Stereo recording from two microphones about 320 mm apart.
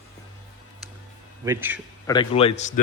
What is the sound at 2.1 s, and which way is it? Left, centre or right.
Speech, centre.